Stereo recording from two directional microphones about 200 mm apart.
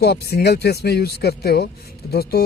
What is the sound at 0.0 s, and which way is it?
Speech, 55° left (ahead or behind).